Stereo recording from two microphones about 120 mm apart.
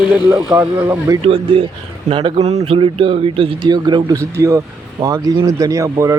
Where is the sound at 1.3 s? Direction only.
50° right (ahead or behind).